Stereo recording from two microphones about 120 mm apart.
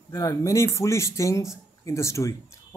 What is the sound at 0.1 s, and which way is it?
A man's voice, 30° left (ahead or behind).